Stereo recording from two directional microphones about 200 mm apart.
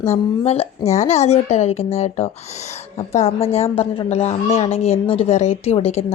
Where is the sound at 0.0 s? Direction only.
30° left (ahead or behind).